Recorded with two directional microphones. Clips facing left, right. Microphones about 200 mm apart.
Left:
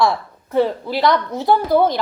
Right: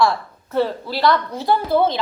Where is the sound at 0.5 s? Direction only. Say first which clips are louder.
Left 3 dB; 20° left (ahead or behind).